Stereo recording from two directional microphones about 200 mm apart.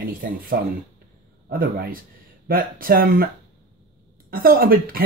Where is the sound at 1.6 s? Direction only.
45° right (ahead or behind).